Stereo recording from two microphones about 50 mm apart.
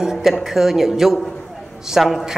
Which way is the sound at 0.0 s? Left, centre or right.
Centre.